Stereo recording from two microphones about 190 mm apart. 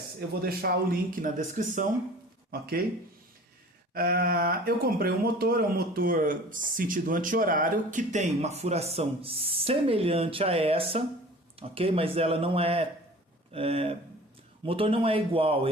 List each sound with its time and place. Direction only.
0.4 s speech: 50° right (ahead or behind)
2.5 s speech: 50° right (ahead or behind)
3.9 s a man's voice: 50° right (ahead or behind); by 15.7 s 30° right (ahead or behind)